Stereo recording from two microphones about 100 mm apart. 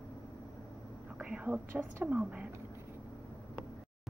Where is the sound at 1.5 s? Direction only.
25° right (ahead or behind).